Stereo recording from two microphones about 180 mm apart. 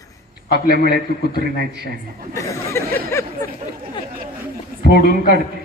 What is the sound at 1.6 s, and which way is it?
Speech, 65° right (ahead or behind).